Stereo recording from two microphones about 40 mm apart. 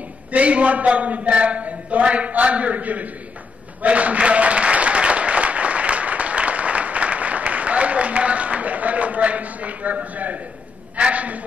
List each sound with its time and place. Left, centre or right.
0.3 s a man's voice: right
3.8 s applause: right
11.0 s a man's voice: right